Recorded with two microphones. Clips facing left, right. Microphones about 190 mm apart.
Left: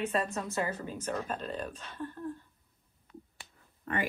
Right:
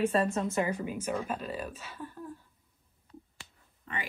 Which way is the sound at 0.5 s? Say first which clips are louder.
Right 3 dB; 15° right (ahead or behind).